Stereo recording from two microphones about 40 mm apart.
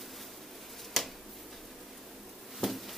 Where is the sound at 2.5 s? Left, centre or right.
Centre.